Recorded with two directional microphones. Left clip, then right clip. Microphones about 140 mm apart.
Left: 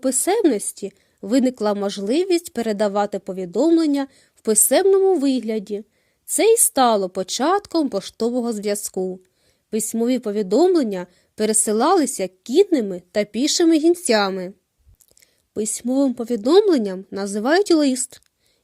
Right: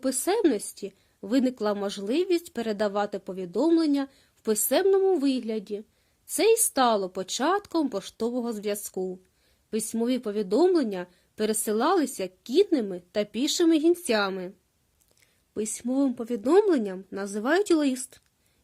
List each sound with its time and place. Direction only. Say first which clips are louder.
0.0 s a woman's voice: left 6 dB; 30° left (ahead or behind)